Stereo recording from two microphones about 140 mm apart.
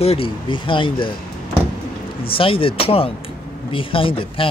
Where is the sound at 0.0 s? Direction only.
45° left (ahead or behind).